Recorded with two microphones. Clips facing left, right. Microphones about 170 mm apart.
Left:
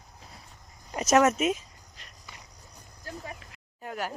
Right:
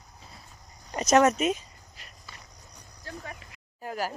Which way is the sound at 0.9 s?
5° left (ahead or behind).